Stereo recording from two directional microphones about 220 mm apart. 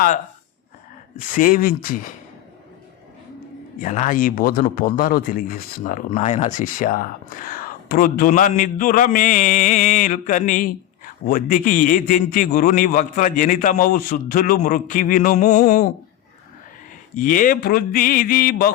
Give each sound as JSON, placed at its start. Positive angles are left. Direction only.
{"t": 1.1, "sound": "a man's voice", "side_deg": 35}
{"t": 3.8, "sound": "a man's voice", "side_deg": 35}
{"t": 17.2, "sound": "a man's voice", "side_deg": 40}